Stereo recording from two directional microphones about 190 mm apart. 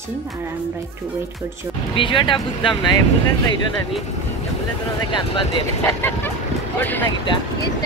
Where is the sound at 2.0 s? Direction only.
25° left (ahead or behind).